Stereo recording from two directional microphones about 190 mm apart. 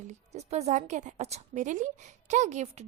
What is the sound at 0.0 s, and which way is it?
A woman's voice, 35° right (ahead or behind).